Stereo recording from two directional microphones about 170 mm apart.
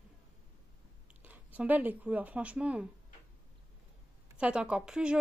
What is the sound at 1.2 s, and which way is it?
Speech, 10° right (ahead or behind).